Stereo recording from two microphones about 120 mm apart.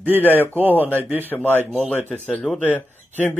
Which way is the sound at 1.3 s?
15° left (ahead or behind).